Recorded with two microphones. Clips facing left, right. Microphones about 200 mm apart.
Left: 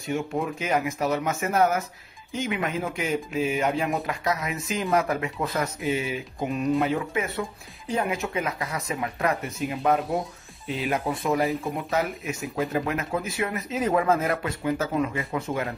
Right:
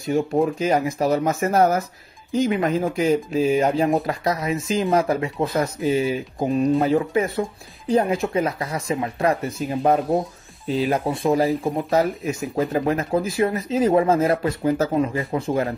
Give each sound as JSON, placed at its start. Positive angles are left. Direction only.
{"t": 0.0, "sound": "speech", "side_deg": -35}